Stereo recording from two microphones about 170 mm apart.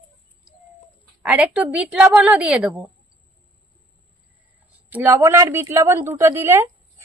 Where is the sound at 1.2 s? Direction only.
10° right (ahead or behind).